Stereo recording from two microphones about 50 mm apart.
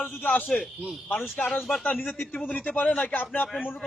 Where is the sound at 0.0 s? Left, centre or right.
Left.